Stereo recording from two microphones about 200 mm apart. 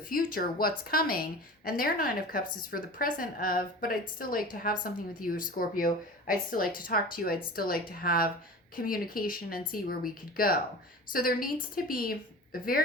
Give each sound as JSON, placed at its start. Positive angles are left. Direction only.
{"t": 0.1, "sound": "a woman's voice", "side_deg": 45}